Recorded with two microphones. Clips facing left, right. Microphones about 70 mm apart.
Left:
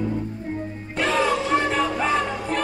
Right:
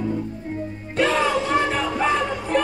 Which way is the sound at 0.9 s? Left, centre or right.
Centre.